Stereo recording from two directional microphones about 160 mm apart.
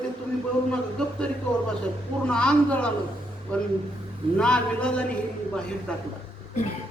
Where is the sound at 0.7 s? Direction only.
5° left (ahead or behind).